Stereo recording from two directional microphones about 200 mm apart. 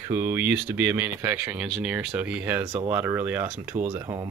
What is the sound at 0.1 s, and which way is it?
Speech, 10° right (ahead or behind).